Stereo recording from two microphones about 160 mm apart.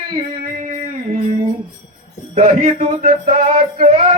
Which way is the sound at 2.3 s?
45° right (ahead or behind).